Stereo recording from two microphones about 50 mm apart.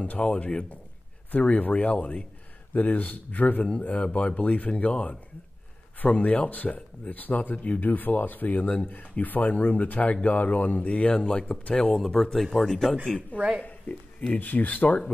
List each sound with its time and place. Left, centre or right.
0.0 s speech: left
6.1 s speech: left
12.0 s speech: centre
13.6 s speech: left